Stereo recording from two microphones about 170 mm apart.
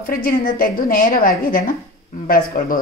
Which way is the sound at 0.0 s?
55° left (ahead or behind).